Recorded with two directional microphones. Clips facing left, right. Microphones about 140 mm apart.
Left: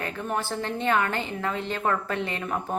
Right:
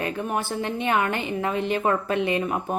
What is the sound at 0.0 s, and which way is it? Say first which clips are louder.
A woman's voice: right 3 dB; 15° right (ahead or behind).